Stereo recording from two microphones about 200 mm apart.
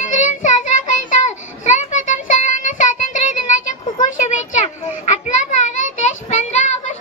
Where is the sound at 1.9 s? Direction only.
40° left (ahead or behind).